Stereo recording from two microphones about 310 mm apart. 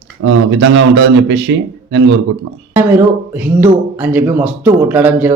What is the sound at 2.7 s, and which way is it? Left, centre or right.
Speech, centre.